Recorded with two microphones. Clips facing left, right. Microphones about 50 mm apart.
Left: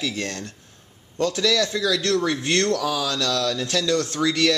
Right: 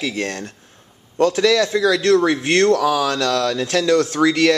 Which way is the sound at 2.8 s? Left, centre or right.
Right.